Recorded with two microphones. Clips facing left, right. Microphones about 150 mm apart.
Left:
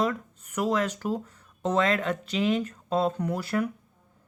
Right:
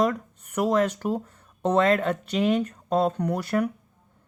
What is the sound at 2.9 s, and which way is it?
Speech, 40° right (ahead or behind).